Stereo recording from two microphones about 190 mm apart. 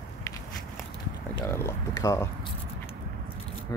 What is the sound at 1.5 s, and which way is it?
Speech, 15° left (ahead or behind).